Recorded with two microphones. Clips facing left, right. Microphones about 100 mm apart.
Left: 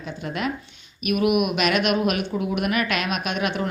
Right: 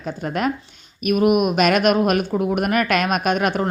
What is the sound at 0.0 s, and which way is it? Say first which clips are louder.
Speech: right 5 dB; 45° right (ahead or behind).